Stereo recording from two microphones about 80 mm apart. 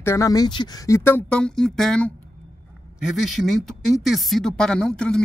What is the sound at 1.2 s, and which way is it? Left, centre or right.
Speech, centre.